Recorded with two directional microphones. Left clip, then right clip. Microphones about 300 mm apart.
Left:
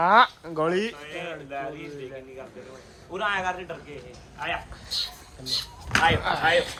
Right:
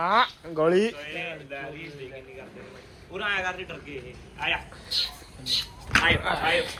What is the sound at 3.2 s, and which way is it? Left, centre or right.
Speech, left.